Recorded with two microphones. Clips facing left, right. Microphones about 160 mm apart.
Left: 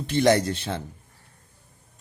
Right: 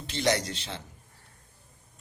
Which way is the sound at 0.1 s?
55° left (ahead or behind).